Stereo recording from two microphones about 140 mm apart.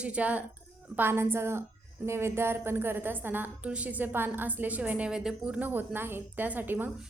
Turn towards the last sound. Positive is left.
turn(degrees=-15)  # may be behind; listen again after turning